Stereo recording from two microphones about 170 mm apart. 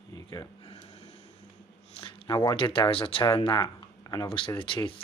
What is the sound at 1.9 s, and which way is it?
Speech, 30° left (ahead or behind).